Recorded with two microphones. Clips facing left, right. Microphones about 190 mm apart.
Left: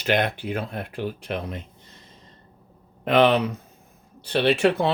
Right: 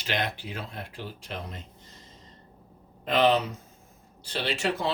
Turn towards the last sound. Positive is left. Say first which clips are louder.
# left 9 dB
turn(degrees=60)  # may be behind; listen again after turning